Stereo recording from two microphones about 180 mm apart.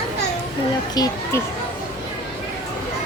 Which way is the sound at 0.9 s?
20° left (ahead or behind).